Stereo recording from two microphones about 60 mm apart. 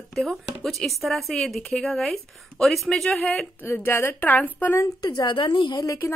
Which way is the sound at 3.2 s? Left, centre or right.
Centre.